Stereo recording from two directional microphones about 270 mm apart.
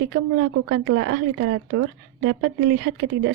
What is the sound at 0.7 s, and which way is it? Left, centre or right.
A woman's voice, right.